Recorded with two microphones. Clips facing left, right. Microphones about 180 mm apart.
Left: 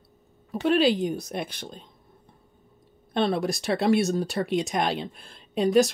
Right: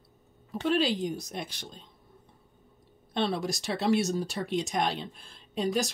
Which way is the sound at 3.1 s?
55° left (ahead or behind).